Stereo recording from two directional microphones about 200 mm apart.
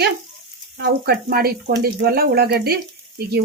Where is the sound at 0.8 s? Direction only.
55° right (ahead or behind).